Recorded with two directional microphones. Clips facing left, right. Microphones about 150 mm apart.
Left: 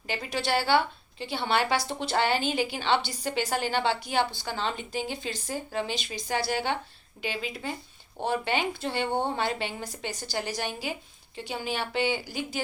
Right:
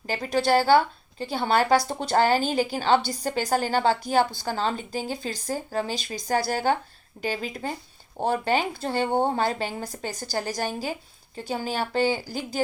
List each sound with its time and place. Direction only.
0.1 s speech: 40° right (ahead or behind)